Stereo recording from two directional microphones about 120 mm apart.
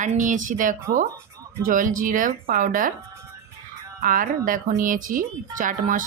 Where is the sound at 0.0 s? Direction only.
90° right.